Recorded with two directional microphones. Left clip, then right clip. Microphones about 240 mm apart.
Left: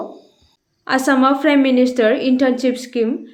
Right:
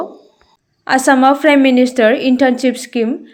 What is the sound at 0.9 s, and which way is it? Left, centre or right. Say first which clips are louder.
A woman's voice: right 5 dB; right.